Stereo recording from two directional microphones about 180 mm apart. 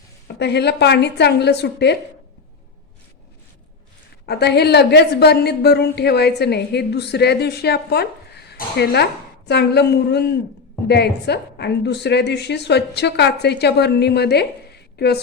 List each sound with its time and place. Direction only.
0.3 s a woman's voice: 70° left (ahead or behind)
4.3 s a woman's voice: 65° left (ahead or behind)